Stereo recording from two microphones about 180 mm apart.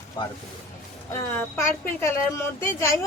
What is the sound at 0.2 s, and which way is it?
Speech, 25° left (ahead or behind).